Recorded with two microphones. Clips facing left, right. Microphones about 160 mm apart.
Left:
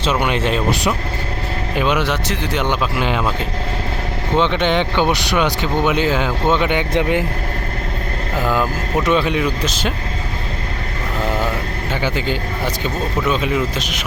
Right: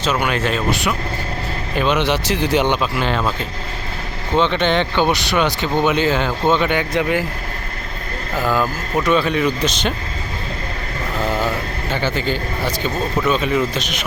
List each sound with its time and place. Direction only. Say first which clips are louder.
0.0 s speech: left 1 dB; 25° left (ahead or behind)
1.7 s speech: right 1 dB; 10° left (ahead or behind)
4.4 s speech: even; 15° left (ahead or behind)
8.4 s speech: even; 15° left (ahead or behind)
9.4 s speech: right 1 dB; 5° left (ahead or behind)
11.9 s speech: even; 15° left (ahead or behind)